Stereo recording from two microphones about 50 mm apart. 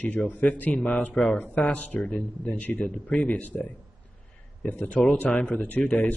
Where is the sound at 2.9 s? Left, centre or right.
Centre.